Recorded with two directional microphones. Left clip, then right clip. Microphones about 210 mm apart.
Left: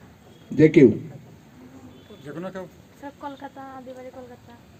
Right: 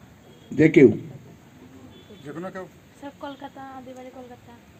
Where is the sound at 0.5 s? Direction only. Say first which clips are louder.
Left 1 dB; 75° left (ahead or behind).